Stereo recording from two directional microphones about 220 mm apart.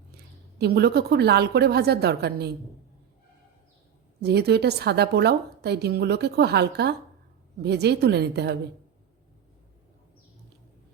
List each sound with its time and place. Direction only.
0.6 s a woman's voice: 45° right (ahead or behind)
4.2 s a woman's voice: 45° right (ahead or behind)